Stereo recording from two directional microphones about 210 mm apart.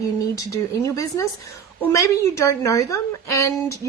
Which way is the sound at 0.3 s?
15° left (ahead or behind).